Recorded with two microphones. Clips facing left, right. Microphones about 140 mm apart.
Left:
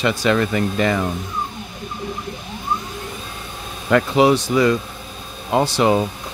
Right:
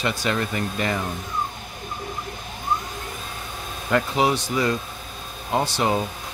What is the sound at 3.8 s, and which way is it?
Speech, 90° left.